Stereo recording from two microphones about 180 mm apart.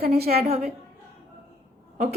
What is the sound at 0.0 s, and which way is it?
Speech, 60° right (ahead or behind).